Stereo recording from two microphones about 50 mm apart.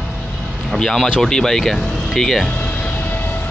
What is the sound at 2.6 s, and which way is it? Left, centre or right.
Vehicle, left.